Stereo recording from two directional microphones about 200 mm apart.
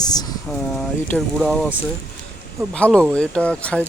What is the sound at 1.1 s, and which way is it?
Speech, centre (ahead or behind).